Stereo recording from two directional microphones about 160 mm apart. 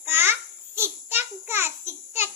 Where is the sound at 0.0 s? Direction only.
15° right (ahead or behind).